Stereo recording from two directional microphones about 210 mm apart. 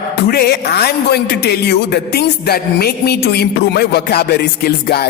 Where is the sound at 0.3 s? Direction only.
50° left (ahead or behind).